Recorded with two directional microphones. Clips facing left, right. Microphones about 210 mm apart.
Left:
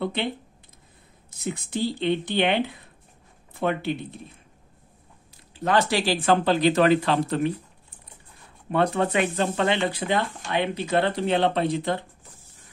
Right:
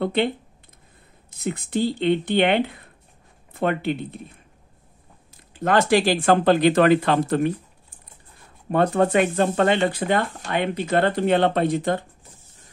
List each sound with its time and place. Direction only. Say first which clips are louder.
0.0 s speech: right 6 dB; 55° right (ahead or behind)
1.4 s speech: right 4 dB; 55° right (ahead or behind)
5.5 s speech: right 4 dB; 50° right (ahead or behind)
8.7 s speech: right 4 dB; 45° right (ahead or behind)